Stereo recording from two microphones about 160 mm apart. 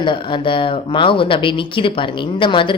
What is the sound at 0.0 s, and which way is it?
A woman's voice, 30° left (ahead or behind).